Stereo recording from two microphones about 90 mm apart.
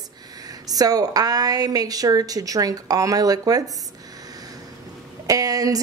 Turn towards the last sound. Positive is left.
turn(degrees=-40)  # may be behind; listen again after turning